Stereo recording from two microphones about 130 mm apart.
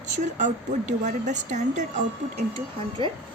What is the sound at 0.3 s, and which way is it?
Speech, 70° right (ahead or behind).